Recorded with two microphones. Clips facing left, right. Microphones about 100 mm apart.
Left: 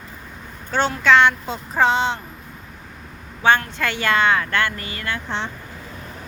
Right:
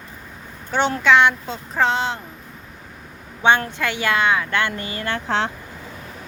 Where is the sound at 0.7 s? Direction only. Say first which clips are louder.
Even; 15° right (ahead or behind).